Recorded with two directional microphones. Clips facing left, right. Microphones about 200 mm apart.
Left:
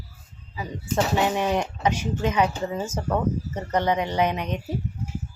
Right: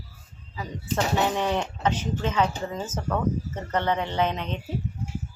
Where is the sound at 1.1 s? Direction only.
10° left (ahead or behind).